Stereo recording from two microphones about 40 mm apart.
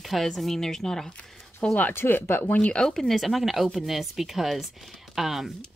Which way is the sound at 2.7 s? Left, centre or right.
Centre.